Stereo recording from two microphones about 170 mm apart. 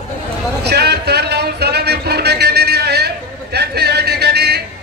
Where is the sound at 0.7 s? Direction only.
75° right (ahead or behind).